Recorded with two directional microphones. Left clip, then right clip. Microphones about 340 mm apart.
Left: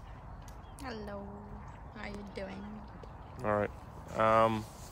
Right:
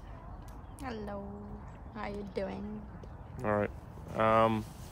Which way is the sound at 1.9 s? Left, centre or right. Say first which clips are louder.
Right 6 dB; right.